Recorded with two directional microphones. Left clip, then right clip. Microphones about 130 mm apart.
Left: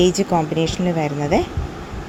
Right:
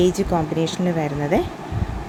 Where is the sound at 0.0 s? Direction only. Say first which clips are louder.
Left 2 dB; 20° left (ahead or behind).